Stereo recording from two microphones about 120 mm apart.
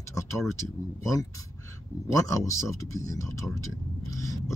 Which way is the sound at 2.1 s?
25° left (ahead or behind).